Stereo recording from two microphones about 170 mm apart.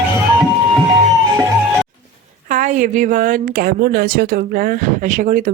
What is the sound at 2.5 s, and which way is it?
Speech, 50° right (ahead or behind).